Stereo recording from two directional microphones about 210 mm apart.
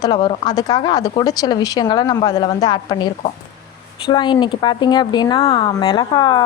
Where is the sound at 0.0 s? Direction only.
20° left (ahead or behind).